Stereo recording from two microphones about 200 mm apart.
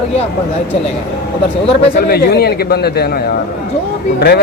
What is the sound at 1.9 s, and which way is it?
A man's voice, 50° left (ahead or behind).